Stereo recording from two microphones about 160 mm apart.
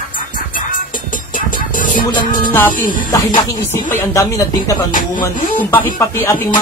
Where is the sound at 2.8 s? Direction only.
30° left (ahead or behind).